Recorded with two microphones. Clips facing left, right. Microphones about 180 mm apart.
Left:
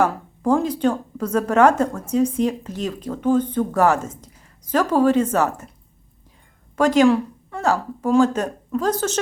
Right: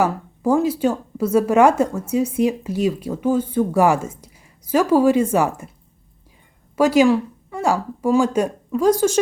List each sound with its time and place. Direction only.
0.0 s speech: 5° right (ahead or behind)
6.7 s speech: 10° right (ahead or behind)